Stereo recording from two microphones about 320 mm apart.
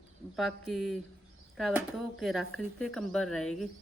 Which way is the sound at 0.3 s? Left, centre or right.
Centre.